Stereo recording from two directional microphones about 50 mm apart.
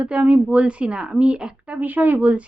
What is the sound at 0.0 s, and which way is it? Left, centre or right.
Speech, right.